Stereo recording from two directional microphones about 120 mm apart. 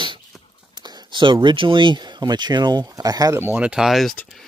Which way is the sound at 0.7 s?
35° right (ahead or behind).